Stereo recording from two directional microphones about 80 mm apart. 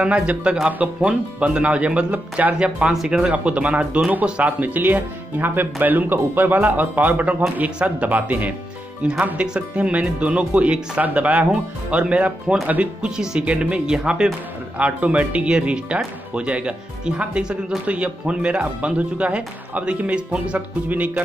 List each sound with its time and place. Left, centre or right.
0.0 s speech: centre